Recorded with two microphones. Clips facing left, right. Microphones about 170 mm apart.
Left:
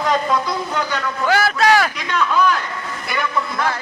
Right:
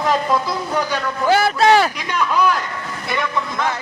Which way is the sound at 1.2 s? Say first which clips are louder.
Right 2 dB; 30° right (ahead or behind).